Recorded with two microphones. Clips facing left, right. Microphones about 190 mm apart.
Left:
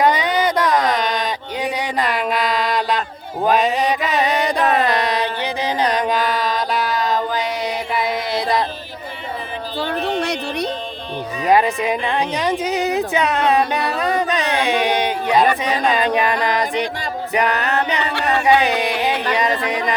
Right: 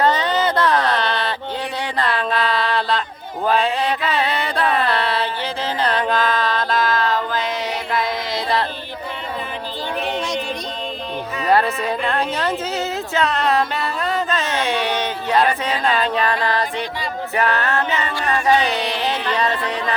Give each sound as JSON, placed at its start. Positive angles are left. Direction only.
{"t": 0.0, "sound": "a sound", "side_deg": 10}
{"t": 3.4, "sound": "mantra", "side_deg": 15}
{"t": 11.4, "sound": "speech", "side_deg": 15}
{"t": 15.6, "sound": "mantra", "side_deg": 15}
{"t": 18.1, "sound": "a sound", "side_deg": 70}
{"t": 18.6, "sound": "mantra", "side_deg": 10}